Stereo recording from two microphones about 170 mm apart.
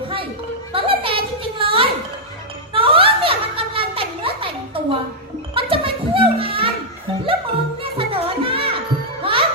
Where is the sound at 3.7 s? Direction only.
30° right (ahead or behind).